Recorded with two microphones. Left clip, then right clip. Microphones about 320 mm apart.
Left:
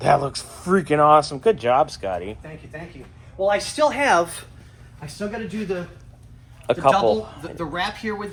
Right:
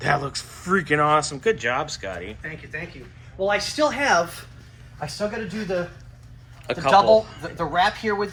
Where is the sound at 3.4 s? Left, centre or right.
Left.